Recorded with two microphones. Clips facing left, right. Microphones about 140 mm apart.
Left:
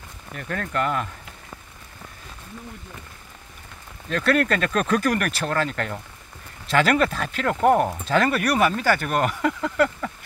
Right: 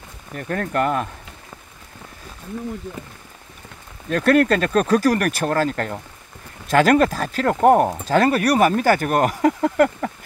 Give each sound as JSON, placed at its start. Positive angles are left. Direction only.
{"t": 0.4, "sound": "speech", "side_deg": -40}
{"t": 4.1, "sound": "speech", "side_deg": -45}